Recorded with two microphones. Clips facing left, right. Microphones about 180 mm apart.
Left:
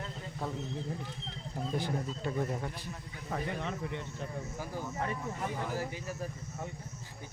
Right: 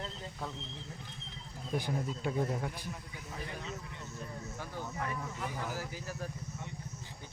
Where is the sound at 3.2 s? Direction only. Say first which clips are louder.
Left 7 dB; 60° left (ahead or behind).